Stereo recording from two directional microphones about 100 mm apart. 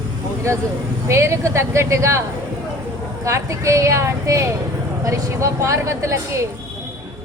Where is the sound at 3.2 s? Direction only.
30° right (ahead or behind).